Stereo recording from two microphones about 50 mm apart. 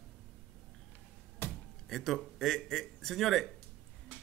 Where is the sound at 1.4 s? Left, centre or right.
Left.